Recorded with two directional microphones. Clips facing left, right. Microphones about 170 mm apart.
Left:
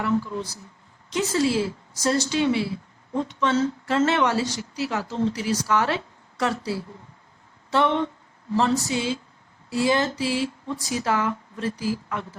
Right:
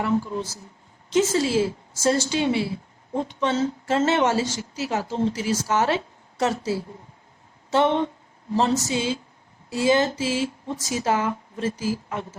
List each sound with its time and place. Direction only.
0.0 s a woman's voice: 25° right (ahead or behind)